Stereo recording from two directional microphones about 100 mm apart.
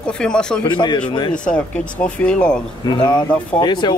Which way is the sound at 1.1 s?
50° left (ahead or behind).